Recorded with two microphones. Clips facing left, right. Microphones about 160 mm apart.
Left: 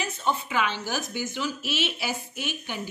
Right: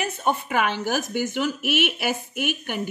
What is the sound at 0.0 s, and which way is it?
Speech, 55° right (ahead or behind).